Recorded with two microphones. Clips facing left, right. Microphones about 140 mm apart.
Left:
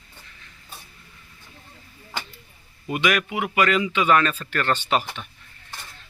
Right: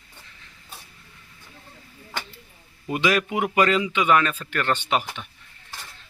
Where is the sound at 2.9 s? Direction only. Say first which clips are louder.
Right 1 dB; 25° right (ahead or behind).